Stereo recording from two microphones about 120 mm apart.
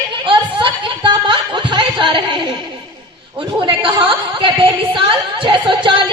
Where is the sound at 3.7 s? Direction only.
45° right (ahead or behind).